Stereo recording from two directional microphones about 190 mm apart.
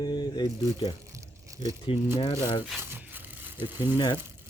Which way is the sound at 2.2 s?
30° left (ahead or behind).